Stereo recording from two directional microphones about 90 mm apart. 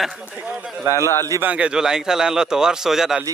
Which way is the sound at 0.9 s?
35° left (ahead or behind).